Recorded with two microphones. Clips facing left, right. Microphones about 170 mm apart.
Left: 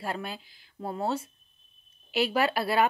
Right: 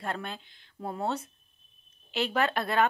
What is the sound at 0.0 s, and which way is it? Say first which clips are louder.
Speech: left 1 dB; 5° left (ahead or behind).